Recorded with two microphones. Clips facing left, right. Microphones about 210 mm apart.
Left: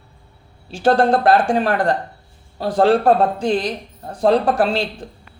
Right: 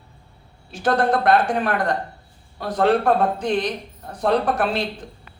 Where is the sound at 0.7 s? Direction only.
30° left (ahead or behind).